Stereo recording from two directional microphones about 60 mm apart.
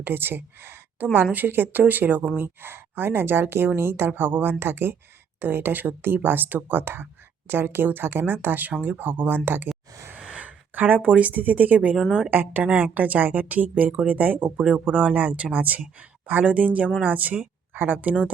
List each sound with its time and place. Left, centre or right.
0.0 s a woman's voice: right
10.2 s speech: right